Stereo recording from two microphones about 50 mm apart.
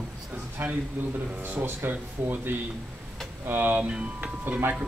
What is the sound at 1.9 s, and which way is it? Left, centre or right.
Speech, right.